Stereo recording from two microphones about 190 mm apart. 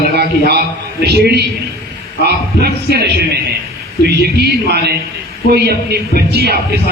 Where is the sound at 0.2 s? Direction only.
55° right (ahead or behind).